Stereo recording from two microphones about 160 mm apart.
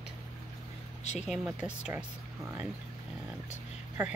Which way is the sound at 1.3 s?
5° right (ahead or behind).